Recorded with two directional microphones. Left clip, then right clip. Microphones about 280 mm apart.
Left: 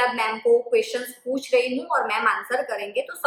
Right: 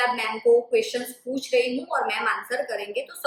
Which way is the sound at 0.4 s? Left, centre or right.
Centre.